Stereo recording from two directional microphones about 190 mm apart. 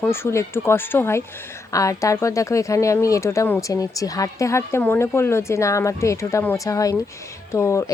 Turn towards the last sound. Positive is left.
turn(degrees=15)  # may be behind; listen again after turning